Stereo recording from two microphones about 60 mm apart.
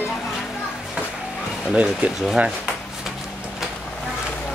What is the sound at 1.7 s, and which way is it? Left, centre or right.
Speech, right.